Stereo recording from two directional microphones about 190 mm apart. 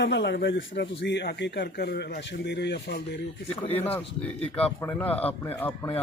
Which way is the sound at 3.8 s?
10° left (ahead or behind).